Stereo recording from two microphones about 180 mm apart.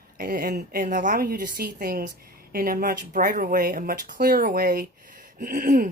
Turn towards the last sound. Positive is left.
turn(degrees=-50)  # may be behind; listen again after turning